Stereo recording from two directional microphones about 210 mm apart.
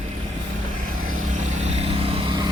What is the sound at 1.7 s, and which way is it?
Vehicle, 25° right (ahead or behind).